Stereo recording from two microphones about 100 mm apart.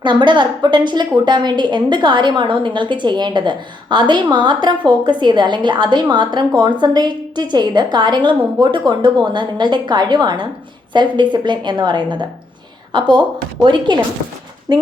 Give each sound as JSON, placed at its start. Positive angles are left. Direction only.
{"t": 0.0, "sound": "a woman's voice", "side_deg": -50}